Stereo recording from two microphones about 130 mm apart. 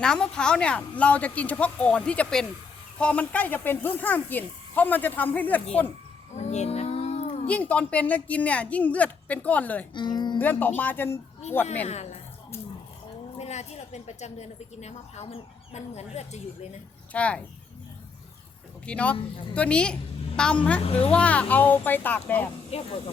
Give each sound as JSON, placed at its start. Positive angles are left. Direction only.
{"t": 0.0, "sound": "speech", "side_deg": 5}
{"t": 6.3, "sound": "a sound", "side_deg": 60}
{"t": 7.4, "sound": "speech", "side_deg": 10}
{"t": 9.9, "sound": "speech", "side_deg": 35}
{"t": 10.3, "sound": "speech", "side_deg": 15}
{"t": 13.4, "sound": "a woman's voice", "side_deg": 55}
{"t": 17.1, "sound": "speech", "side_deg": 10}
{"t": 18.9, "sound": "speech", "side_deg": 10}
{"t": 19.1, "sound": "speech", "side_deg": 40}
{"t": 19.5, "sound": "a woman's voice", "side_deg": 10}
{"t": 20.8, "sound": "speech", "side_deg": 50}
{"t": 21.1, "sound": "speech", "side_deg": 10}
{"t": 22.7, "sound": "speech", "side_deg": 50}